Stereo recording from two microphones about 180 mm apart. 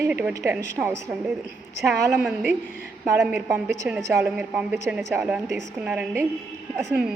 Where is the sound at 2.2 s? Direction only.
5° right (ahead or behind).